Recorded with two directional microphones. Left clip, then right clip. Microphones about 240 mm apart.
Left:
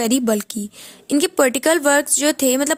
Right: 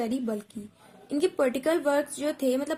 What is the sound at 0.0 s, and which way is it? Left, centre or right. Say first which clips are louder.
Speech: left 12 dB; left.